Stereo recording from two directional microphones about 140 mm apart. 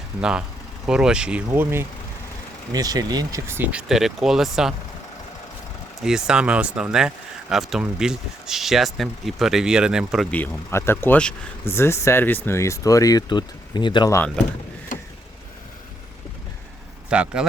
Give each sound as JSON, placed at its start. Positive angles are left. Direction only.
{"t": 0.2, "sound": "speech", "side_deg": -5}
{"t": 2.7, "sound": "speech", "side_deg": -25}
{"t": 6.0, "sound": "speech", "side_deg": -5}
{"t": 10.3, "sound": "speech", "side_deg": 15}
{"t": 14.9, "sound": "vehicle", "side_deg": 70}
{"t": 17.1, "sound": "speech", "side_deg": -5}